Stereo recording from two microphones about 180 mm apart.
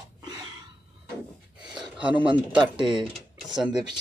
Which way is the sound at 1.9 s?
5° right (ahead or behind).